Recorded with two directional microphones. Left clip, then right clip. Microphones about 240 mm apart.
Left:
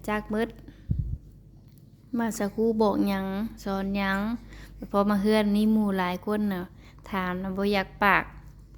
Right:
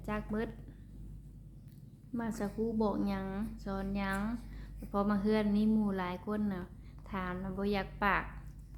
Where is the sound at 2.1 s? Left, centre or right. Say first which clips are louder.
Left 9 dB; left.